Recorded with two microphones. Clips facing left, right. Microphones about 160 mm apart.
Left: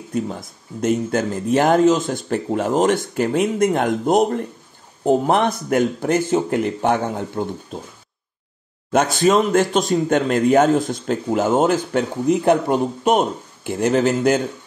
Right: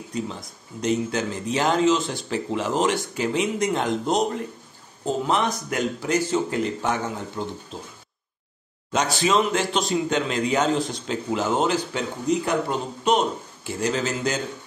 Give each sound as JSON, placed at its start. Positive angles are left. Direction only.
{"t": 0.1, "sound": "a man's voice", "side_deg": 50}
{"t": 8.9, "sound": "a man's voice", "side_deg": 50}